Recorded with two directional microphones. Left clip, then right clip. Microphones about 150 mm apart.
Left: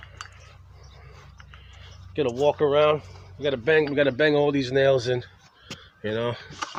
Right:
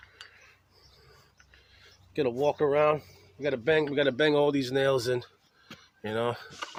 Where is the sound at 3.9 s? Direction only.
40° right (ahead or behind).